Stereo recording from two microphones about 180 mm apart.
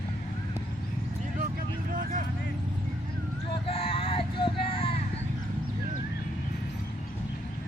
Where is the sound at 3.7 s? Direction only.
30° left (ahead or behind).